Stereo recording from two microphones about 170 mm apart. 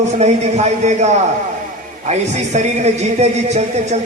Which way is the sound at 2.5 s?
40° right (ahead or behind).